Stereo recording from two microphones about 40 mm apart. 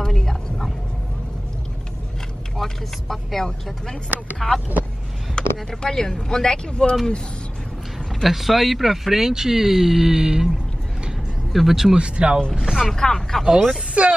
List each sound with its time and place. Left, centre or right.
0.0 s bow-wow: centre
2.5 s speech: centre
5.4 s a sound: left
5.7 s speech: centre
8.2 s speech: centre
11.5 s speech: centre
11.9 s speech: right
12.5 s speech: centre
12.9 s speech: centre
14.0 s speech: right